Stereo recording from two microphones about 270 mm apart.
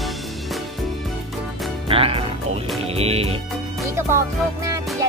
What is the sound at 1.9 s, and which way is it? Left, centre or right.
Music, right.